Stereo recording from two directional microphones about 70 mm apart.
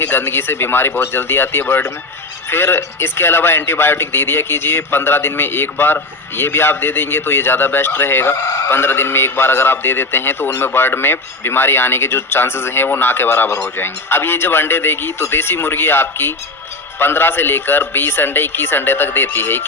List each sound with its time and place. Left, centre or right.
0.0 s a man's voice: left